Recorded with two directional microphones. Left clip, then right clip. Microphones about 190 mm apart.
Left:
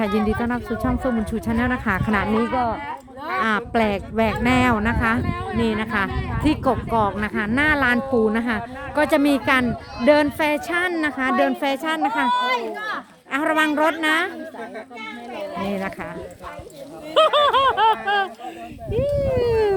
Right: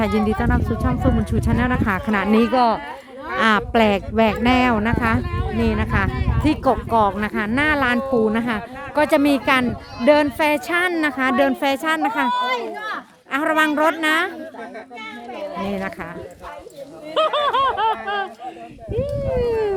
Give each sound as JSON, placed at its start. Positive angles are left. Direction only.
{"t": 0.0, "sound": "speech", "side_deg": -10}
{"t": 3.4, "sound": "speech", "side_deg": -15}
{"t": 12.3, "sound": "speech", "side_deg": 10}
{"t": 13.3, "sound": "speech", "side_deg": -5}
{"t": 15.6, "sound": "speech", "side_deg": -5}
{"t": 17.2, "sound": "a sound", "side_deg": 65}